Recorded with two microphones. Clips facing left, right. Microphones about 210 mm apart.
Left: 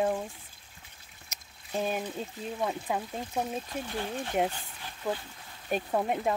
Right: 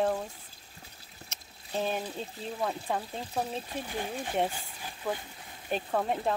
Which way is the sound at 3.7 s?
10° right (ahead or behind).